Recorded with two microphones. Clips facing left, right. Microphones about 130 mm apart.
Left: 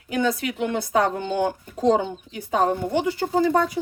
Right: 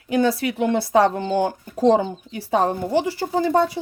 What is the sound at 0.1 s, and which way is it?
Speech, 30° right (ahead or behind).